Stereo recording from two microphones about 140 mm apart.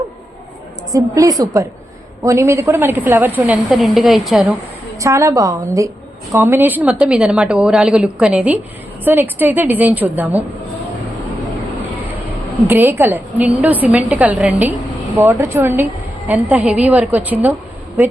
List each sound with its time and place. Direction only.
0.9 s a woman's voice: 25° right (ahead or behind)
3.7 s a woman's voice: centre (ahead or behind)
4.9 s a woman's voice: 20° right (ahead or behind)
12.6 s a woman's voice: 15° right (ahead or behind)